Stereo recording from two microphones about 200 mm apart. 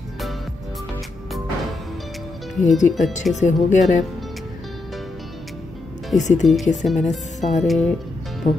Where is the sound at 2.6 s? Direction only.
35° left (ahead or behind).